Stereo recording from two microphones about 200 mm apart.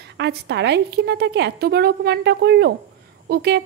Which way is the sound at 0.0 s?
60° right (ahead or behind).